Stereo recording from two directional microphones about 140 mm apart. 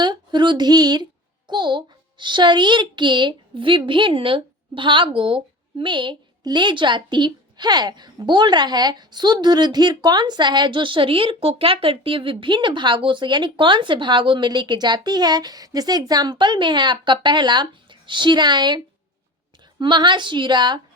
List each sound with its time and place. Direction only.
0.0 s a sound: 30° right (ahead or behind)
1.5 s a child's voice: 35° right (ahead or behind)
19.8 s a child's voice: 35° right (ahead or behind)